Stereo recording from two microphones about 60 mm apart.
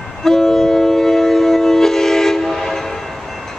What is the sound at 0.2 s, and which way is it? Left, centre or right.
Train, centre.